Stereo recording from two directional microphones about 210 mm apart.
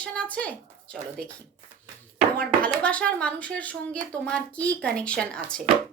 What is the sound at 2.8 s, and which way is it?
A woman's voice, 5° left (ahead or behind).